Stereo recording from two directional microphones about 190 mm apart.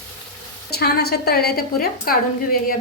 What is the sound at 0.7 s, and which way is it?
A woman's voice, 55° left (ahead or behind).